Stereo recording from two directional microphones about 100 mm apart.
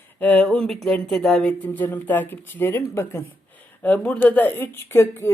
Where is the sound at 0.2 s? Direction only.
15° left (ahead or behind).